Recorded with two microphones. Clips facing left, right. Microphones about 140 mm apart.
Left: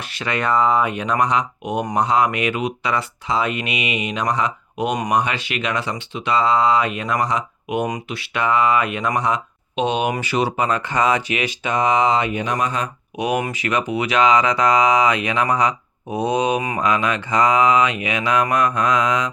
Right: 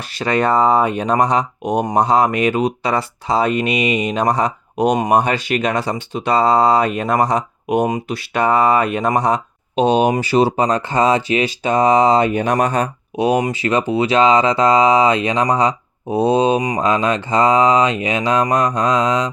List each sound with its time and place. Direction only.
0.0 s speech: 35° right (ahead or behind)
13.1 s speech: 30° right (ahead or behind)